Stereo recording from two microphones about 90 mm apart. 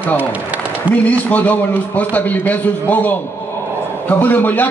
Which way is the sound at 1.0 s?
15° left (ahead or behind).